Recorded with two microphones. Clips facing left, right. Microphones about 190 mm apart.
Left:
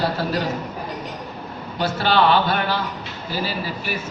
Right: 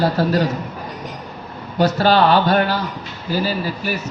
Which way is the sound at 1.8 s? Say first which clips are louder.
Right 5 dB; 40° right (ahead or behind).